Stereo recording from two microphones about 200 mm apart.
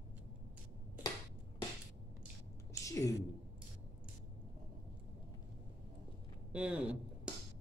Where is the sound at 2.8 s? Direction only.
15° left (ahead or behind).